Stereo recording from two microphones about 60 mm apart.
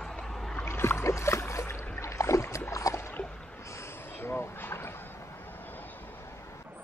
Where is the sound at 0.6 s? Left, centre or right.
Left.